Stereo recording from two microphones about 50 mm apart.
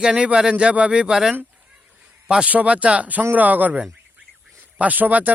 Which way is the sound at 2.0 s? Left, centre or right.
Centre.